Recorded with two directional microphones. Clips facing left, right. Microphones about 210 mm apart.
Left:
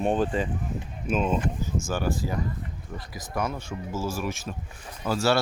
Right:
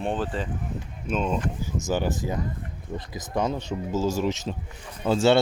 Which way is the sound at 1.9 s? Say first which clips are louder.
Right 3 dB; 20° right (ahead or behind).